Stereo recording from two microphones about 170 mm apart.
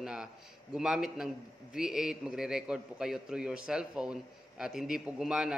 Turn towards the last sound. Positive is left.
turn(degrees=-5)  # may be behind; listen again after turning